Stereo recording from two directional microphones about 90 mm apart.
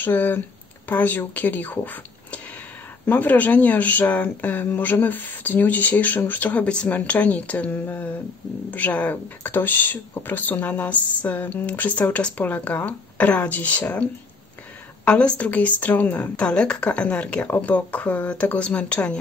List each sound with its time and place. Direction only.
0.0 s speech: 20° left (ahead or behind)
15.0 s a woman's voice: 15° left (ahead or behind)